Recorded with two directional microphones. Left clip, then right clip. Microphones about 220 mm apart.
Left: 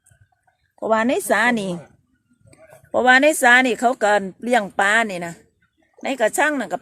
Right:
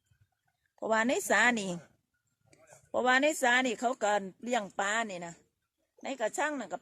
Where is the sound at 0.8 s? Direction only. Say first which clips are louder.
Left 10 dB; 20° right (ahead or behind).